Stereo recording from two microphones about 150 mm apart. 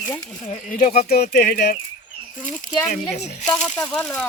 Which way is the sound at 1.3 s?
90° left.